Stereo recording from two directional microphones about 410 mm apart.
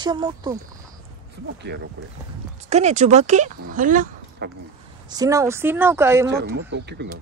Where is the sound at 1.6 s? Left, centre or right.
Right; by 6.2 s centre.